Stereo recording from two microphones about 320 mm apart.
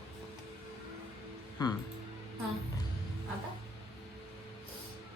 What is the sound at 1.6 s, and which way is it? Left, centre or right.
Speech, centre.